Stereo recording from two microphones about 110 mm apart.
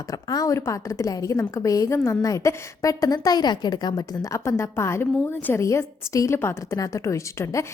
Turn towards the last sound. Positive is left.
turn(degrees=25)  # may be behind; listen again after turning